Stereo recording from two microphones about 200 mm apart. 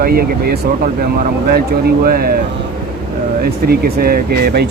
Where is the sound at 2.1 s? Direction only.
50° right (ahead or behind).